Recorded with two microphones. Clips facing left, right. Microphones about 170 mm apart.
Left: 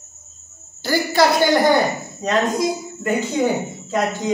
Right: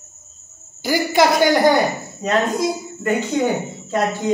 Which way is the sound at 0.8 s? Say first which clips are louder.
Right 1 dB; 15° right (ahead or behind).